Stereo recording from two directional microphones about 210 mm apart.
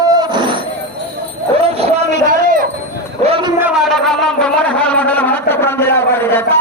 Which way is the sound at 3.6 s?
Centre (ahead or behind).